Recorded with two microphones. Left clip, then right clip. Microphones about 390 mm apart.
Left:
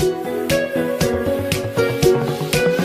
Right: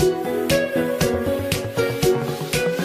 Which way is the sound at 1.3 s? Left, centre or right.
Left.